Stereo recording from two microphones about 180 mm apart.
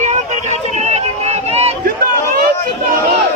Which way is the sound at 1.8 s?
55° right (ahead or behind).